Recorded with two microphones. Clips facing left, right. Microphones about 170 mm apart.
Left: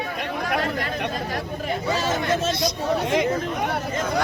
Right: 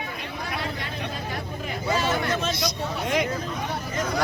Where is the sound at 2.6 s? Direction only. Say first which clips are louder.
Left 5 dB; 25° left (ahead or behind).